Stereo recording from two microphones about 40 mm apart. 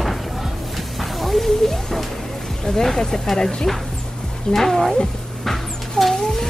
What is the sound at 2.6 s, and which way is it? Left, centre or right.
Speech, centre.